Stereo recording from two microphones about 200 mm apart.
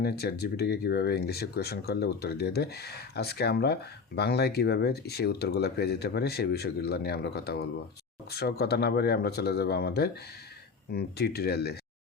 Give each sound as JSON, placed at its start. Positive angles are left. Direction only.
{"t": 0.0, "sound": "speech", "side_deg": 55}